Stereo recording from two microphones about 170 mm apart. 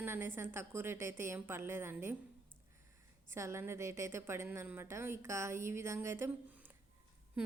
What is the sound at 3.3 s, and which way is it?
A woman's voice, 15° right (ahead or behind).